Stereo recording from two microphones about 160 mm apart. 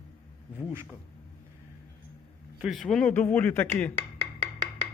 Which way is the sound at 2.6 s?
Centre (ahead or behind).